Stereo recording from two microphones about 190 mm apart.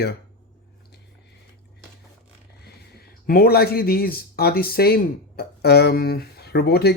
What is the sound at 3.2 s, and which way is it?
Speech, 50° left (ahead or behind).